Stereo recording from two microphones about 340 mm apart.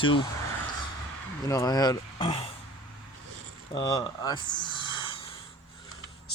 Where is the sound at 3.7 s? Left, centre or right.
Centre.